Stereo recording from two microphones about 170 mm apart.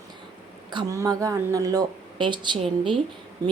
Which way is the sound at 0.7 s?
25° right (ahead or behind).